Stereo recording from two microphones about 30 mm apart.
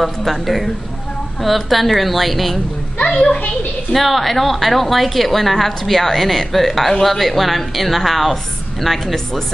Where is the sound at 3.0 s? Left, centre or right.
Left.